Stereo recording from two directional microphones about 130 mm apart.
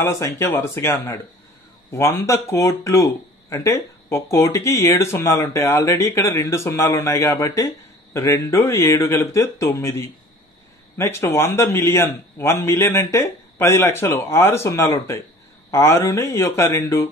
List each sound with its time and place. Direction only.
0.0 s speech: 20° left (ahead or behind)